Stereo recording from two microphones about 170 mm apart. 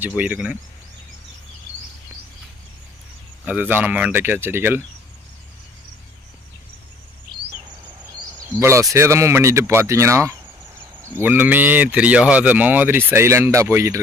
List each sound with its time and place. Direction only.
0.2 s speech: 5° right (ahead or behind)
3.4 s speech: 10° right (ahead or behind)
8.2 s speech: 15° right (ahead or behind)